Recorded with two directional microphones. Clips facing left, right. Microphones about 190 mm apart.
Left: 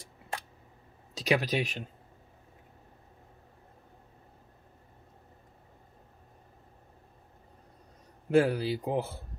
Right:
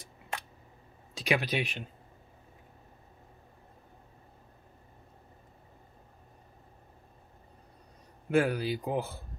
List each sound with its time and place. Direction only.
0.0 s a sound: 30° left (ahead or behind)
1.1 s speech: 35° left (ahead or behind)
8.3 s a man's voice: 30° left (ahead or behind)